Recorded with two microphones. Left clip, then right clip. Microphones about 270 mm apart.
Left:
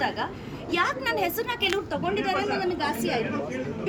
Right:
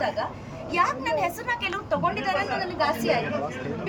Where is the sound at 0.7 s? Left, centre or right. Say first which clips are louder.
Right 1 dB; centre.